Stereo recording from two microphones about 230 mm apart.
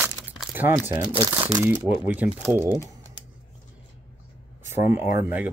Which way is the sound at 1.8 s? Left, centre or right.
Centre.